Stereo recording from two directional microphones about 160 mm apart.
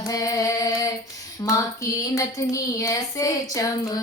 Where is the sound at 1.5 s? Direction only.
20° left (ahead or behind).